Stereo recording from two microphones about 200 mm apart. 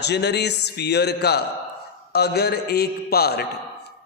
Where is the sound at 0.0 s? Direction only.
60° left (ahead or behind).